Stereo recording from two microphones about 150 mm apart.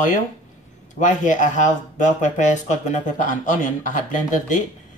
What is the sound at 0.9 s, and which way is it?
Speech, 60° left (ahead or behind).